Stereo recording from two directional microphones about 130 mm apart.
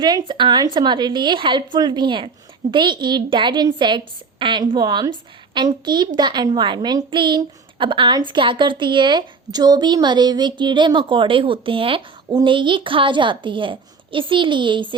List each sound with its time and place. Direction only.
0.0 s a woman's voice: 35° right (ahead or behind)